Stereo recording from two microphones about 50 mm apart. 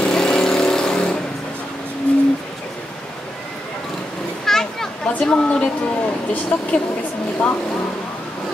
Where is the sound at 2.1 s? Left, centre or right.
Left.